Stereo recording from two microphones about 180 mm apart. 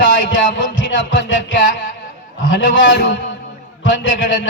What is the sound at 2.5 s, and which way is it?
Speech, 90° left.